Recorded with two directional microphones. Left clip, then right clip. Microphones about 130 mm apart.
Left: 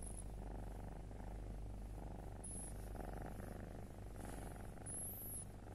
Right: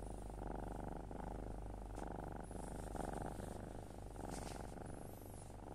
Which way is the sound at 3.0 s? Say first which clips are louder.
Right 5 dB; 25° right (ahead or behind).